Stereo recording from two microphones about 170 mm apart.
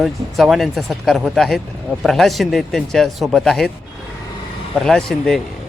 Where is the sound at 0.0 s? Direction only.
Centre (ahead or behind).